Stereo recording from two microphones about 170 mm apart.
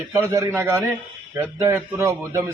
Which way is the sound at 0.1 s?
20° right (ahead or behind).